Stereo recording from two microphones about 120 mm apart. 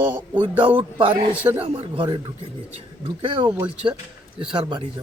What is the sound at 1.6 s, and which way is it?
Speech, 50° right (ahead or behind).